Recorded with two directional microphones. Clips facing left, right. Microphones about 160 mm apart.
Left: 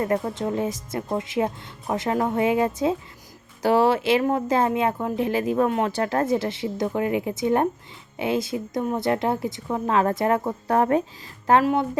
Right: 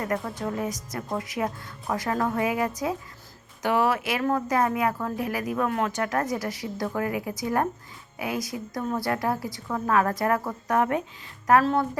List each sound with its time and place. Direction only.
0.0 s speech: 25° left (ahead or behind)
11.6 s speech: 15° left (ahead or behind)